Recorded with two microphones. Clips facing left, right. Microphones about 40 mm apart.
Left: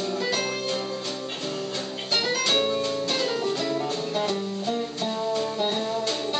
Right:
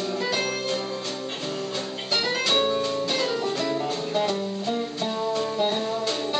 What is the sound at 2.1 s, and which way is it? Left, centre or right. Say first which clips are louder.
Music: even; centre.